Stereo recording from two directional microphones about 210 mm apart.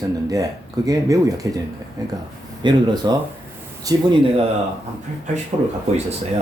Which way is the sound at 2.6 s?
20° right (ahead or behind).